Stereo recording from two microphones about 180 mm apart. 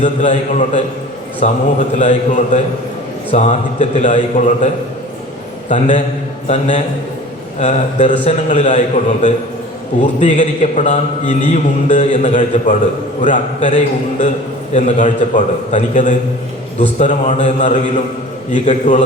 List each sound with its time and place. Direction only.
0.0 s a man's voice: 45° left (ahead or behind)